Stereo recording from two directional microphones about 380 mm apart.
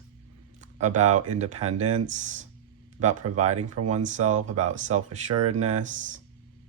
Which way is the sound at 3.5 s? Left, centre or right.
Right.